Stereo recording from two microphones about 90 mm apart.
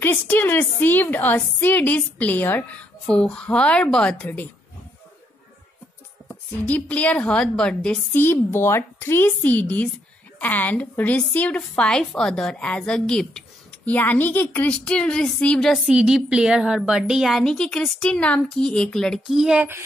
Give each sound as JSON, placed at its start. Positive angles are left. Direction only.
{"t": 0.0, "sound": "a woman's voice", "side_deg": 25}
{"t": 6.6, "sound": "a woman's voice", "side_deg": 15}
{"t": 8.1, "sound": "a woman's voice", "side_deg": 25}
{"t": 13.8, "sound": "a woman's voice", "side_deg": 20}
{"t": 15.9, "sound": "a woman's voice", "side_deg": -10}